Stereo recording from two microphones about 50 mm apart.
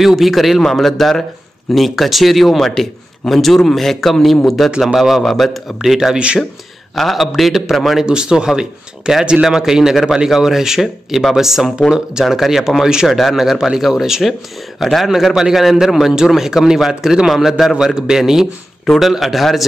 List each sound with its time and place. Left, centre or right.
0.0 s a man's voice: centre
6.1 s speech: right
7.0 s a man's voice: centre
8.0 s a man's voice: centre